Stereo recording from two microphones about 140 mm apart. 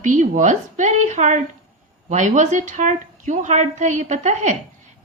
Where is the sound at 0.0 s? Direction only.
65° right (ahead or behind).